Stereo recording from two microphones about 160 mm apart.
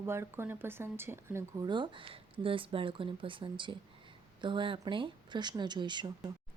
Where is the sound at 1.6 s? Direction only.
30° right (ahead or behind).